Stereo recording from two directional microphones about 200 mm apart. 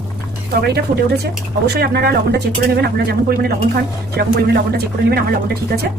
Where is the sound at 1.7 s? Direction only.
50° right (ahead or behind).